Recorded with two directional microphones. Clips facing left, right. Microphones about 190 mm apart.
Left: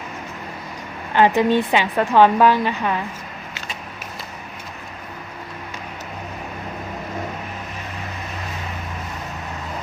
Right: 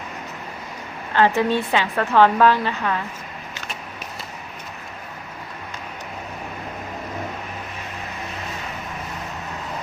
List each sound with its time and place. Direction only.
1.1 s a woman's voice: 15° left (ahead or behind)